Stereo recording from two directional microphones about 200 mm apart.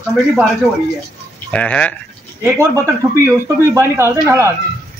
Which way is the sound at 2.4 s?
15° right (ahead or behind).